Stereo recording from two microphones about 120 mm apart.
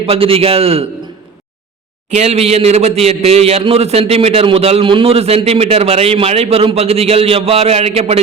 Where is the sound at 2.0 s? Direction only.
65° right (ahead or behind).